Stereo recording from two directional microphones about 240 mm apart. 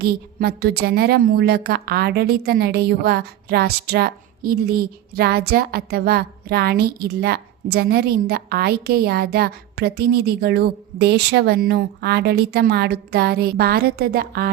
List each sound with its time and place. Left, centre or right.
0.0 s a woman's voice: right